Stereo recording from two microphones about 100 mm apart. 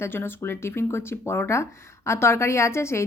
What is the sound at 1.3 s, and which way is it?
Speech, 25° left (ahead or behind).